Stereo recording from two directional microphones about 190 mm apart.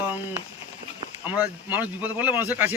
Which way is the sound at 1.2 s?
10° right (ahead or behind).